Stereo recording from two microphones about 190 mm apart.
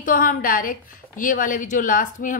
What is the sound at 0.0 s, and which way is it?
A woman's voice, 45° left (ahead or behind).